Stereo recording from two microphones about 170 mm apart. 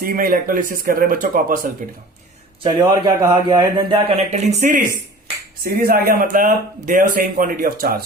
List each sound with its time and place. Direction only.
0.0 s speech: 60° right (ahead or behind)
2.6 s a man's voice: 25° right (ahead or behind)
5.6 s speech: 65° right (ahead or behind)